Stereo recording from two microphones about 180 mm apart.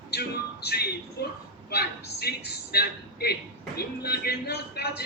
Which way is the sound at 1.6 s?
60° left (ahead or behind).